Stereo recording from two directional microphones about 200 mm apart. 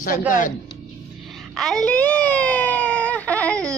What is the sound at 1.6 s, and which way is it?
A child's voice, 5° left (ahead or behind).